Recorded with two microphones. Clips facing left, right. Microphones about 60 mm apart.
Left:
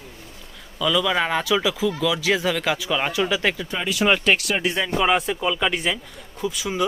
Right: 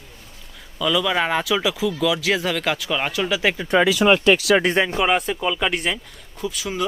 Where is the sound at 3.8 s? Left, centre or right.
Right.